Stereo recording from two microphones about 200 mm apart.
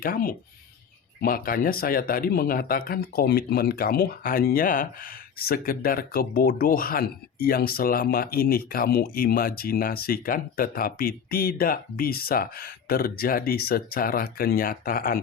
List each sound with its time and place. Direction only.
0.0 s speech: 45° left (ahead or behind)